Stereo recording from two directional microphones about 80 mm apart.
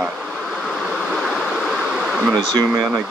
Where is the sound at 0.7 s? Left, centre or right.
Centre.